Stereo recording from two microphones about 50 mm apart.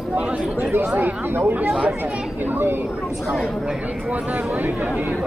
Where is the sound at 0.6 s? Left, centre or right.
Right.